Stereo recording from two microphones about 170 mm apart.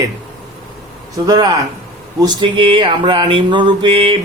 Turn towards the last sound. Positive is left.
turn(degrees=-30)  # may be behind; listen again after turning